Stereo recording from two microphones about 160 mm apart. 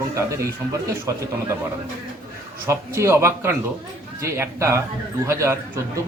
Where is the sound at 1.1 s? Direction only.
20° right (ahead or behind).